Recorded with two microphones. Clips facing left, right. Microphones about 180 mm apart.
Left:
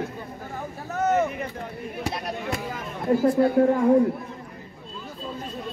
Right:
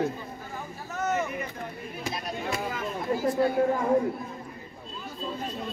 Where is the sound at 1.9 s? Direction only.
65° left (ahead or behind).